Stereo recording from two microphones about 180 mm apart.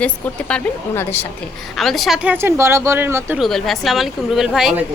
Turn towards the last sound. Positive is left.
turn(degrees=0)  # may be behind; listen again after turning